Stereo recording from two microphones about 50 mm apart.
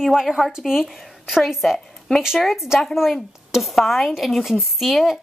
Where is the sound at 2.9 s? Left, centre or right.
Centre.